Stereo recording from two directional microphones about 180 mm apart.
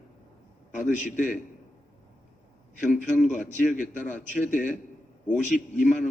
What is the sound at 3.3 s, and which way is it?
A man's voice, 45° left (ahead or behind).